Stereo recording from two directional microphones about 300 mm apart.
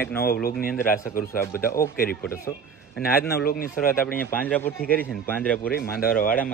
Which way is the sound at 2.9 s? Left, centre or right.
Left.